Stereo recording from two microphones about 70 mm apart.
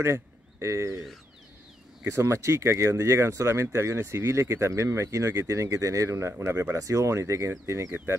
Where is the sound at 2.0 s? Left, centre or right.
Right.